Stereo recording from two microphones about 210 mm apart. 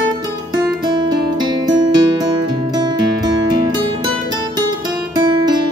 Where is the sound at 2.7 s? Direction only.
20° right (ahead or behind).